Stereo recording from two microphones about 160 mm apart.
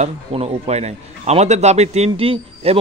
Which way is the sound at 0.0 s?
40° right (ahead or behind).